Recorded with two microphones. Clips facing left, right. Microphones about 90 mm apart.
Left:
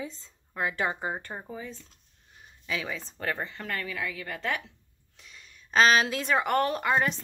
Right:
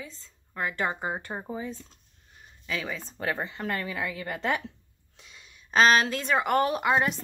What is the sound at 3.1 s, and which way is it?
A woman's voice, 10° right (ahead or behind).